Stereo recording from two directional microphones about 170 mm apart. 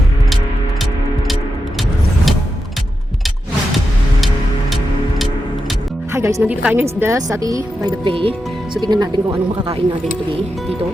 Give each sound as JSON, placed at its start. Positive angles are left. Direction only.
{"t": 6.1, "sound": "speech", "side_deg": -15}
{"t": 7.0, "sound": "speech", "side_deg": -20}